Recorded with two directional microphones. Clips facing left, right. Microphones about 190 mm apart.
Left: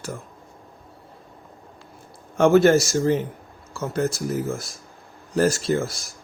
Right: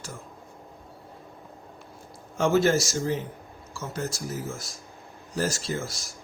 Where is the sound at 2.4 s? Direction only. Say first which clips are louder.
Left 7 dB; 60° left (ahead or behind).